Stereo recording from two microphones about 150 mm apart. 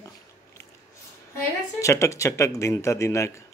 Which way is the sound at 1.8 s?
20° left (ahead or behind).